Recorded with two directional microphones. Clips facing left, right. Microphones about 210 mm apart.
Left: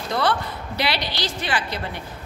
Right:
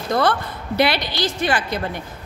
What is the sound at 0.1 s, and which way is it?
A man's voice, 50° right (ahead or behind).